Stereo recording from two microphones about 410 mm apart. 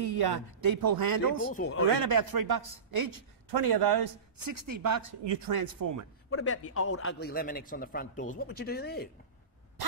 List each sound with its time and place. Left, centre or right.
0.0 s speech: right
1.5 s a man's voice: left
2.0 s speech: right
5.2 s speech: right
6.3 s a man's voice: left